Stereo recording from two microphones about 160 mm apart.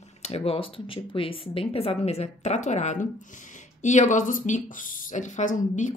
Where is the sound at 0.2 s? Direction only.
35° left (ahead or behind).